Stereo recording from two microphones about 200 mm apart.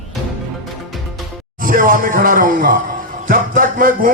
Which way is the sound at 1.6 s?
45° right (ahead or behind).